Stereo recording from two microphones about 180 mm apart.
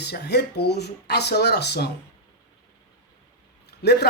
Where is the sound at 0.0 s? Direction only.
65° left (ahead or behind).